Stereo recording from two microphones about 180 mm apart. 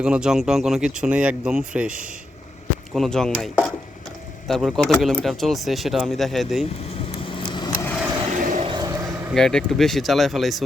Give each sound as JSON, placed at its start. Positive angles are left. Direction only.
{"t": 0.0, "sound": "speech", "side_deg": -5}
{"t": 4.4, "sound": "speech", "side_deg": 0}
{"t": 7.3, "sound": "vehicle", "side_deg": 25}
{"t": 7.7, "sound": "vehicle", "side_deg": 10}
{"t": 8.4, "sound": "a sound", "side_deg": -50}
{"t": 8.6, "sound": "a sound", "side_deg": -20}
{"t": 9.3, "sound": "speech", "side_deg": 5}